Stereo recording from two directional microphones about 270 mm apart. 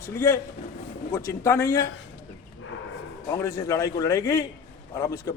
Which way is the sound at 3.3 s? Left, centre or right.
Centre.